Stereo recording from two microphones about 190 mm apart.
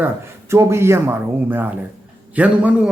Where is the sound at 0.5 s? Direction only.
15° right (ahead or behind).